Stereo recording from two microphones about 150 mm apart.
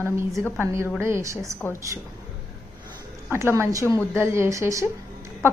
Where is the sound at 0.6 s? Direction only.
20° right (ahead or behind).